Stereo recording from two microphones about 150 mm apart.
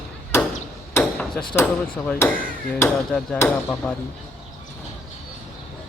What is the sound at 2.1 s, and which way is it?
Speech, 10° left (ahead or behind).